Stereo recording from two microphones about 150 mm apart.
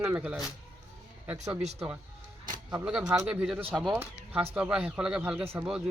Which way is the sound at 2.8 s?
5° right (ahead or behind).